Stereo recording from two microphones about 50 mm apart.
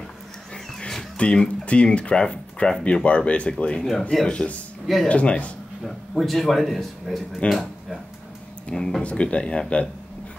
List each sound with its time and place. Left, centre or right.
0.7 s music: centre
1.2 s speech: left
5.9 s speech: centre; by 9.8 s left